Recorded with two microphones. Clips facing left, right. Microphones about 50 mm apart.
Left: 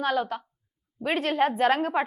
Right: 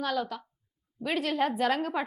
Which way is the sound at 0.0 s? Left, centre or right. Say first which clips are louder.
Left 4 dB; left.